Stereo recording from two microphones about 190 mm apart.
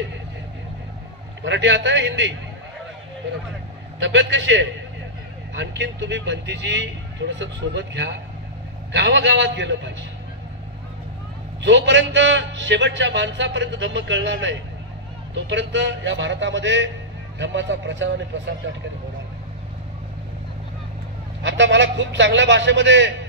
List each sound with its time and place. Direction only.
1.4 s a man's voice: 70° right (ahead or behind)
4.0 s a man's voice: 75° right (ahead or behind)
11.6 s a man's voice: 70° right (ahead or behind)
21.4 s a man's voice: 70° right (ahead or behind)